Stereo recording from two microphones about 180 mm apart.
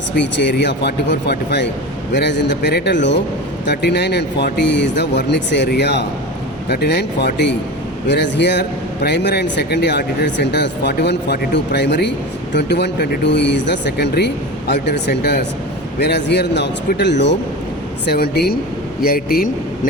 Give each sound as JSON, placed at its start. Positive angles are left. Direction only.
{"t": 0.2, "sound": "a man's voice", "side_deg": 75}